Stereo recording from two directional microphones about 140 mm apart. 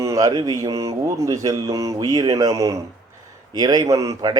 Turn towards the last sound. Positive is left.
turn(degrees=-25)  # may be behind; listen again after turning